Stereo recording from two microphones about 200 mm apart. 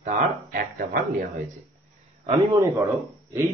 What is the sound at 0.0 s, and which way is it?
Speech, 45° right (ahead or behind).